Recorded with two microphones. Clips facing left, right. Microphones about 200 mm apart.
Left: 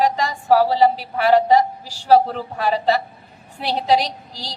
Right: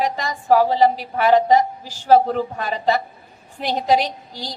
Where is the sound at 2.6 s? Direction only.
35° left (ahead or behind).